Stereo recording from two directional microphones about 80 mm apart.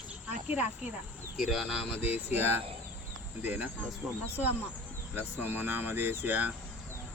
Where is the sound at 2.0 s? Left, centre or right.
Right.